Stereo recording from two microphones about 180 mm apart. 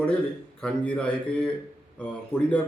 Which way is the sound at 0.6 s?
5° left (ahead or behind).